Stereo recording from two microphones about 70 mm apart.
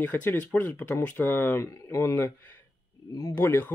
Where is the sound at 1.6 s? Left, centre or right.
Left.